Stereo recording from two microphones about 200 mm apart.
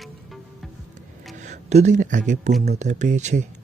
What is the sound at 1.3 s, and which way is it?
Speech, 35° right (ahead or behind).